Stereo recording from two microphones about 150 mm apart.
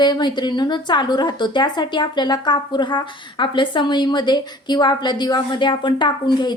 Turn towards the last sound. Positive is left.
turn(degrees=30)  # may be behind; listen again after turning